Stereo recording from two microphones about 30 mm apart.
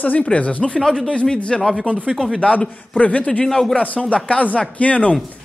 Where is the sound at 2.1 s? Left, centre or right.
Centre.